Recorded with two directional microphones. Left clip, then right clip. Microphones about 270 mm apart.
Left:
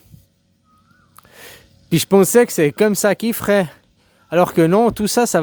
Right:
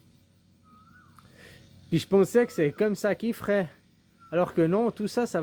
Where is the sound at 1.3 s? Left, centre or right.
Left.